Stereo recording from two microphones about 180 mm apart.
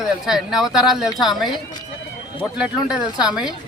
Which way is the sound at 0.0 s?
Centre (ahead or behind).